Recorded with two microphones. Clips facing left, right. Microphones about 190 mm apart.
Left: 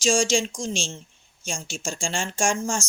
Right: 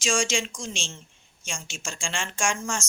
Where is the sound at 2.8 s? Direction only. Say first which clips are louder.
Left 5 dB; 20° right (ahead or behind).